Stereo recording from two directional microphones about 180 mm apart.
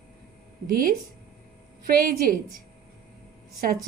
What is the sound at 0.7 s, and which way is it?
A woman's voice, 55° right (ahead or behind).